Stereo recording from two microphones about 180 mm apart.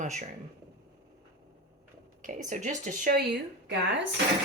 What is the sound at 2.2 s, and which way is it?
Speech, 45° right (ahead or behind).